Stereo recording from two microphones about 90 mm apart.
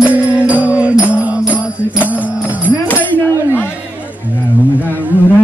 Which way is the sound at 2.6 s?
20° left (ahead or behind).